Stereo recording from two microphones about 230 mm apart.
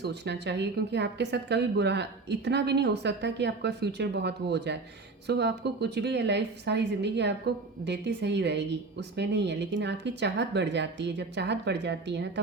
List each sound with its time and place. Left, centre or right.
0.0 s speech: right